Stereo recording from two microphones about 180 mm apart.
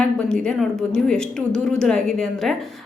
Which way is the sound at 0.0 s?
5° left (ahead or behind).